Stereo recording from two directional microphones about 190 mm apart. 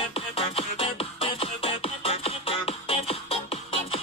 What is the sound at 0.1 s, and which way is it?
Music, 30° left (ahead or behind).